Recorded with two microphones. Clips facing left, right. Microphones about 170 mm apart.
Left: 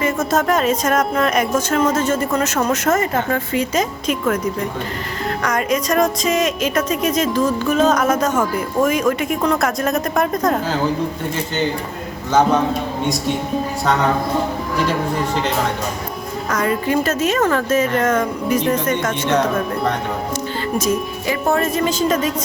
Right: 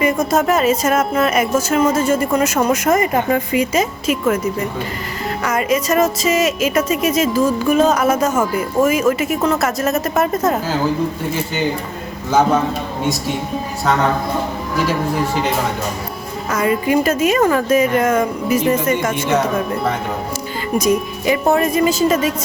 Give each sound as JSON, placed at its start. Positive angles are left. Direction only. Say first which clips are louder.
{"t": 0.0, "sound": "music", "louder": "right 2 dB", "side_deg": -10}
{"t": 5.4, "sound": "music", "louder": "right 2 dB", "side_deg": -5}
{"t": 12.3, "sound": "music", "louder": "even", "side_deg": -10}
{"t": 16.5, "sound": "music", "louder": "right 3 dB", "side_deg": -5}